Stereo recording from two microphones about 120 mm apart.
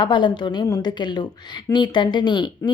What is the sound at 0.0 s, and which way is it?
A woman's voice, 40° left (ahead or behind).